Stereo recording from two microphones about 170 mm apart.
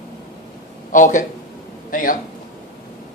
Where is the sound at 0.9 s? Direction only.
50° left (ahead or behind).